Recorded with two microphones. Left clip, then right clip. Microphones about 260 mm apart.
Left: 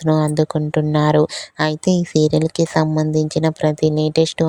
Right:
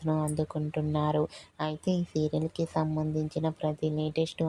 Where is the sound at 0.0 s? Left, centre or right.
Left.